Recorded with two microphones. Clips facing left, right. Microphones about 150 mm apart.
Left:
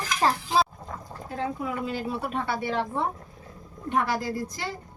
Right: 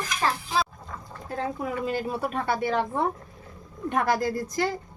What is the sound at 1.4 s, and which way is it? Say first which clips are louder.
Speech: right 1 dB; 45° right (ahead or behind).